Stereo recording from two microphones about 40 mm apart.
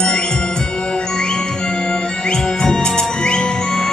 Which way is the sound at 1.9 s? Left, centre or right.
Centre.